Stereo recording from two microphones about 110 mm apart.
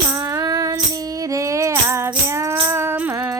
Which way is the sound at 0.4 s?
35° right (ahead or behind).